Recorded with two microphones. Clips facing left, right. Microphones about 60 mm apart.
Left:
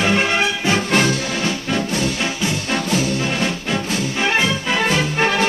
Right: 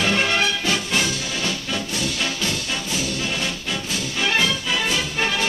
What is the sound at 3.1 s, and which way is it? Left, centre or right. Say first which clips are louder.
Music: left 5 dB; left.